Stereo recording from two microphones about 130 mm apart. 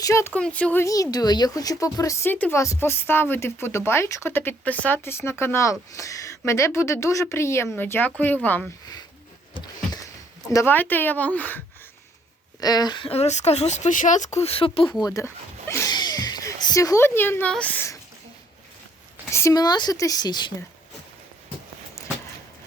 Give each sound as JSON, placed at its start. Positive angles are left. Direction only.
{"t": 0.0, "sound": "speech", "side_deg": 20}
{"t": 0.3, "sound": "speech", "side_deg": 10}
{"t": 1.1, "sound": "speech", "side_deg": 30}
{"t": 10.5, "sound": "speech", "side_deg": 20}
{"t": 12.5, "sound": "a woman's voice", "side_deg": 30}
{"t": 13.1, "sound": "speech", "side_deg": 55}
{"t": 15.0, "sound": "speech", "side_deg": 20}
{"t": 15.9, "sound": "a sound", "side_deg": 30}
{"t": 17.5, "sound": "speech", "side_deg": 10}
{"t": 19.3, "sound": "a woman's voice", "side_deg": 20}